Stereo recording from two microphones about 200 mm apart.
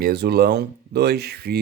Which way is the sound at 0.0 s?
55° right (ahead or behind).